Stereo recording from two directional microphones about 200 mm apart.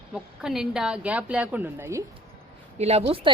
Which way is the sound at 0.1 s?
5° right (ahead or behind).